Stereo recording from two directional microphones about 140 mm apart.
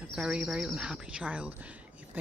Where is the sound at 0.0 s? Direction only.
5° right (ahead or behind).